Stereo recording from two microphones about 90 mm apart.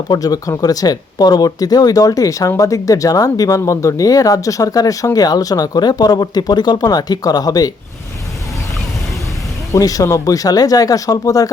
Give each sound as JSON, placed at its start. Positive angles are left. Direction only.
{"t": 0.1, "sound": "speech", "side_deg": 45}
{"t": 9.7, "sound": "speech", "side_deg": 40}